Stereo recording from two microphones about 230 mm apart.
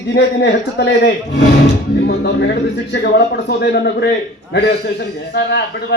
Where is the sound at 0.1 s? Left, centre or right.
Left.